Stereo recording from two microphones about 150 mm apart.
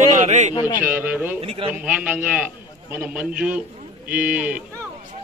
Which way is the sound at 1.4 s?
40° right (ahead or behind).